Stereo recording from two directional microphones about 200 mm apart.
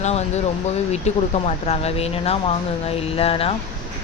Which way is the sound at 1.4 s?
30° left (ahead or behind).